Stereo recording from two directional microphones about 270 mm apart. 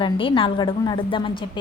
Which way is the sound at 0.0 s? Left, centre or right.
Centre.